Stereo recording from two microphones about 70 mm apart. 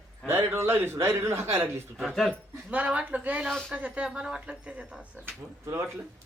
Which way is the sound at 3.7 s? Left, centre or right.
Centre.